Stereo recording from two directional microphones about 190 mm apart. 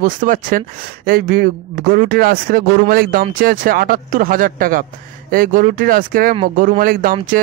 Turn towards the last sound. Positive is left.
turn(degrees=-45)  # may be behind; listen again after turning